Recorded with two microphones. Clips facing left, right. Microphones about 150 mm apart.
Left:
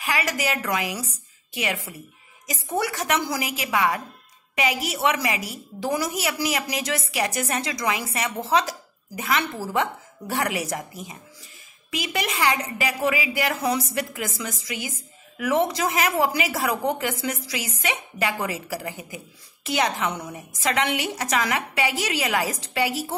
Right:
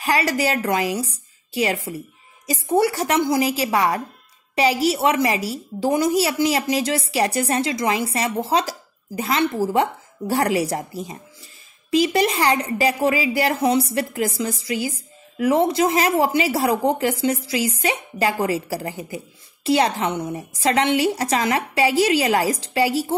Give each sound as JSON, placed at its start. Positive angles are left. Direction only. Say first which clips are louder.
{"t": 0.0, "sound": "a woman's voice", "louder": "right 6 dB", "side_deg": -35}